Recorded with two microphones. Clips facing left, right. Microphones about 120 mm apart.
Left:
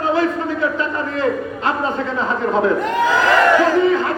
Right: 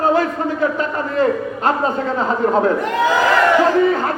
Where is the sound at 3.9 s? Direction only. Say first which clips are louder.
Left 1 dB; 40° right (ahead or behind).